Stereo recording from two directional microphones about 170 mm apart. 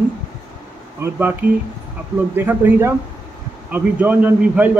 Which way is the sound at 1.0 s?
15° right (ahead or behind).